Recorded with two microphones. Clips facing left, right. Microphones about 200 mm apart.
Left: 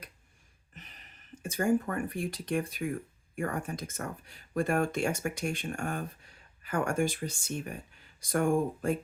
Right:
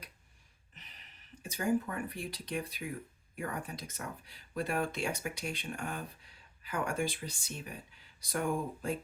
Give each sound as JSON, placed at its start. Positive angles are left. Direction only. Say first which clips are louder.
{"t": 0.7, "sound": "speech", "louder": "left 6 dB", "side_deg": 50}